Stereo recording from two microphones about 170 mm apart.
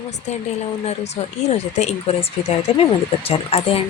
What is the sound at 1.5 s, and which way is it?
Speech, 40° left (ahead or behind).